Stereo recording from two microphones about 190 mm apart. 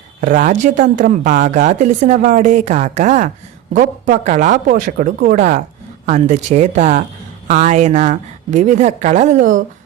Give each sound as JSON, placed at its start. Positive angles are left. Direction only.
{"t": 0.2, "sound": "speech", "side_deg": -45}